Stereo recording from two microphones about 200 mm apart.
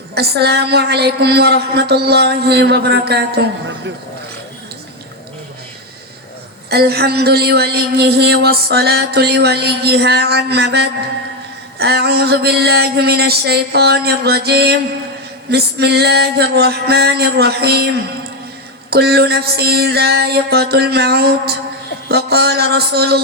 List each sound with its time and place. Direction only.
0.1 s a woman's voice: 55° right (ahead or behind)
6.7 s speech: 50° right (ahead or behind)